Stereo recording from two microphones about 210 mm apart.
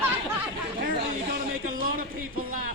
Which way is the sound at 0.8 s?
45° right (ahead or behind).